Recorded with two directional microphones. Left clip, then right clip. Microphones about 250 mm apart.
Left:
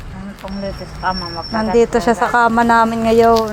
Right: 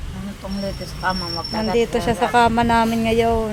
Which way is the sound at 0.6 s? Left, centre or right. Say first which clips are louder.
Left 3 dB; right.